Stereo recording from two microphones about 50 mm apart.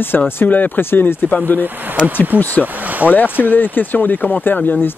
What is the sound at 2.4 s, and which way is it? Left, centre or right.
Speech, left.